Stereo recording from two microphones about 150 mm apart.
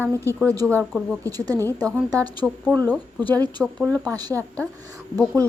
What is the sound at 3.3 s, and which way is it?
A woman's voice, 25° right (ahead or behind).